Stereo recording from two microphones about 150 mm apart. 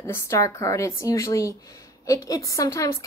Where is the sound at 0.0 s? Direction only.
20° left (ahead or behind).